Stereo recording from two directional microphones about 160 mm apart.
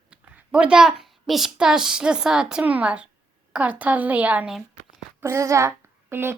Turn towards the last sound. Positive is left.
turn(degrees=-15)  # may be behind; listen again after turning